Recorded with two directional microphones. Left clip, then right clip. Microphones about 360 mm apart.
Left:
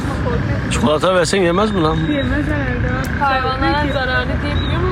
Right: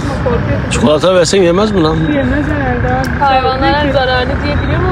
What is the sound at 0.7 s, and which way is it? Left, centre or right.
Speech, centre.